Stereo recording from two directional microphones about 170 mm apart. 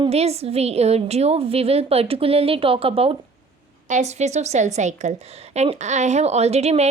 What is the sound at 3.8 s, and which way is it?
A woman's voice, 45° right (ahead or behind).